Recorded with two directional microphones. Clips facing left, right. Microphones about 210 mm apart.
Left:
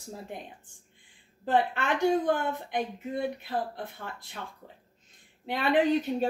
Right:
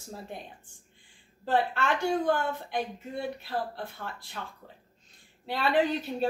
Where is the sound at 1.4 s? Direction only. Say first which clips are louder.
Left 1 dB; 20° left (ahead or behind).